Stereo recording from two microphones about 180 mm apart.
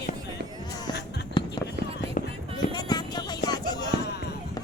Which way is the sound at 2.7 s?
25° left (ahead or behind).